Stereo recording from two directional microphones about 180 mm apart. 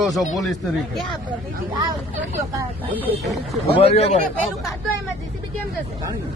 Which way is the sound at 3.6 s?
35° left (ahead or behind).